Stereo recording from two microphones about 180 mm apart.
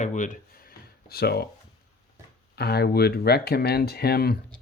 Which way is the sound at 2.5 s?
60° left (ahead or behind).